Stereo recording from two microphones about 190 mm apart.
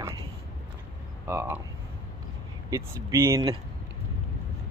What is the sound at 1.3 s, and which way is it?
Speech, 10° right (ahead or behind).